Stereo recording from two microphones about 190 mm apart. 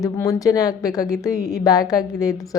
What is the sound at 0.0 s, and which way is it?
A woman's voice, 15° left (ahead or behind).